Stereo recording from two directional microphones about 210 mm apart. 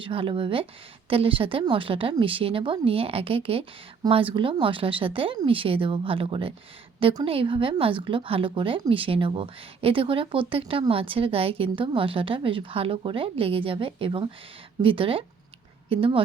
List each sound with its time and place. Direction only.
0.0 s a woman's voice: 25° right (ahead or behind)